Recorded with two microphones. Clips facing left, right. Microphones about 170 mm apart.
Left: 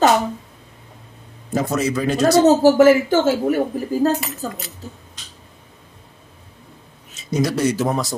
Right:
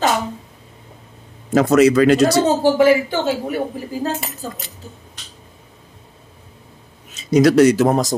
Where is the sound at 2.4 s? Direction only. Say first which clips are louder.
Left 3 dB; 45° left (ahead or behind).